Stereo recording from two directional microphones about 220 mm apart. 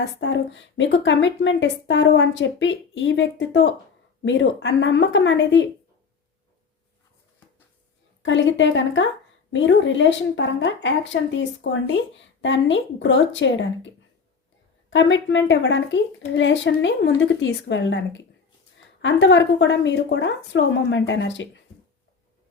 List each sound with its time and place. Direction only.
0.0 s speech: 55° left (ahead or behind)
8.2 s speech: 55° left (ahead or behind)